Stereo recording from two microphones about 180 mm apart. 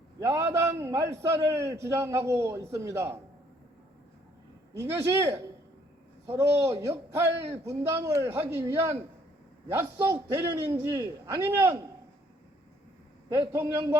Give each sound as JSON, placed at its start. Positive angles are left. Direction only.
{"t": 0.2, "sound": "a man's voice", "side_deg": -15}
{"t": 4.8, "sound": "a man's voice", "side_deg": -15}
{"t": 13.3, "sound": "a man's voice", "side_deg": -15}